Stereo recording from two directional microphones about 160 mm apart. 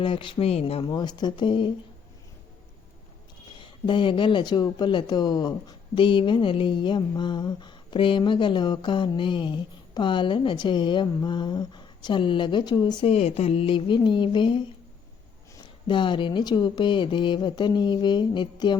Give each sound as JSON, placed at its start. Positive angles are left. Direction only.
{"t": 0.0, "sound": "speech", "side_deg": 30}
{"t": 3.6, "sound": "speech", "side_deg": 30}
{"t": 13.1, "sound": "speech", "side_deg": 40}